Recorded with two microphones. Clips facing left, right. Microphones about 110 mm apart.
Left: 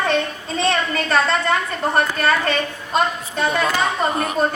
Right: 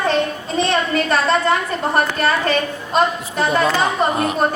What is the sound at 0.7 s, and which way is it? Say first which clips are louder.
A woman's voice: right 2 dB; 30° right (ahead or behind).